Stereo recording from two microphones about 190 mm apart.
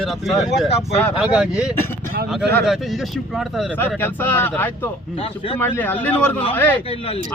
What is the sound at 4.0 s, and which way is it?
Speech, 10° left (ahead or behind).